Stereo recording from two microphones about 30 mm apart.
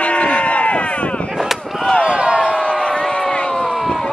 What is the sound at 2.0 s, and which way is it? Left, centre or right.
Slam, right.